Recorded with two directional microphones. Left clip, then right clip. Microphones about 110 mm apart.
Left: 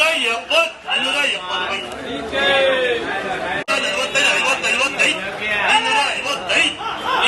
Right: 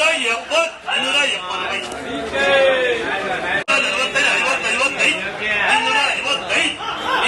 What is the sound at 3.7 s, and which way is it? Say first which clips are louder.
Chatter: right 1 dB; 15° left (ahead or behind).